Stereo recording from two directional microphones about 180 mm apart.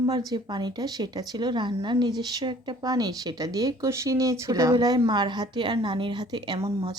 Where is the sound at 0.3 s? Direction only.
25° right (ahead or behind).